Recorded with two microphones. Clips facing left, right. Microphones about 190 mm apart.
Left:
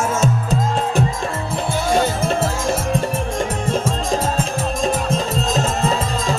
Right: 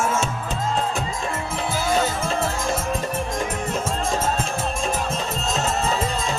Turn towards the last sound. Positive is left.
turn(degrees=35)  # may be behind; listen again after turning